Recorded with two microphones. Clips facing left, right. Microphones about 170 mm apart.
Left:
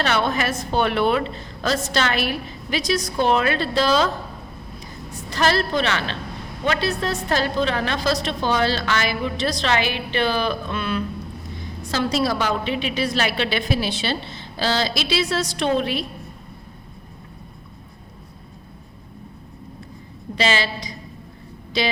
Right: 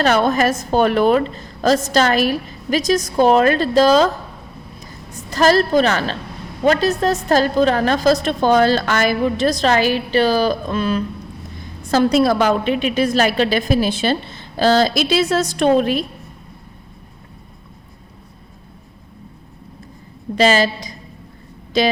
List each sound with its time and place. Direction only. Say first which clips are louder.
0.0 s a woman's voice: right 6 dB; 45° right (ahead or behind)
5.3 s a woman's voice: right 7 dB; 40° right (ahead or behind)
11.9 s a woman's voice: right 8 dB; 50° right (ahead or behind)
20.3 s a woman's voice: right 7 dB; 45° right (ahead or behind)